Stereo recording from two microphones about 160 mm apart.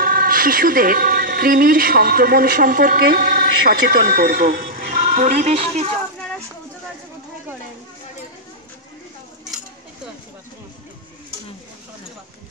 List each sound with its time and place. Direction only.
0.0 s a woman's voice: 65° right (ahead or behind); by 5.9 s 40° right (ahead or behind)